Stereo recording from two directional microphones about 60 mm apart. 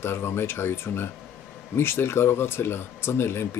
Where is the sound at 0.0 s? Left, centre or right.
Left.